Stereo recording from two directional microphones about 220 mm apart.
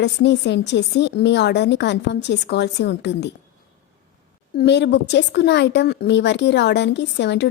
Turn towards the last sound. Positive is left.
turn(degrees=50)  # may be behind; listen again after turning